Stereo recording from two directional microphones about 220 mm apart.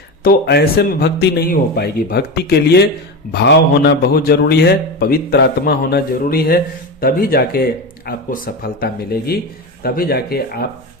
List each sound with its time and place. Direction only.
0.2 s a man's voice: 45° left (ahead or behind)